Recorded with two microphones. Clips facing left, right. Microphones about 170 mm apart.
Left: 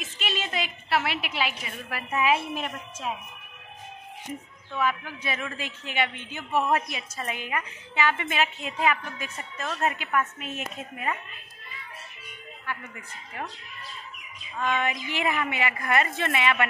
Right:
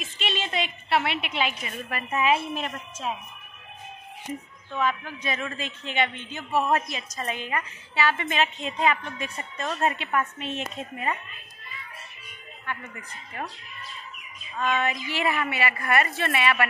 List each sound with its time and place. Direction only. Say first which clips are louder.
0.0 s a woman's voice: right 1 dB; centre (ahead or behind)
5.2 s a woman's voice: right 2 dB; 10° left (ahead or behind)
12.6 s a woman's voice: right 1 dB; 10° left (ahead or behind)
14.6 s a woman's voice: right 1 dB; 15° left (ahead or behind)